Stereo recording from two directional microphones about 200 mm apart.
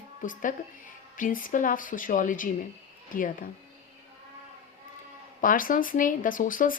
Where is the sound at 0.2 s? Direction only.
40° left (ahead or behind).